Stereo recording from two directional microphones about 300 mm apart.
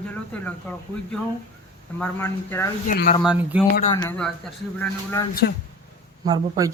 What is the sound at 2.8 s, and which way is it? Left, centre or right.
Speech, left.